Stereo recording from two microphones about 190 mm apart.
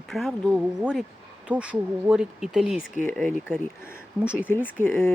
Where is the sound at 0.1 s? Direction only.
Centre (ahead or behind).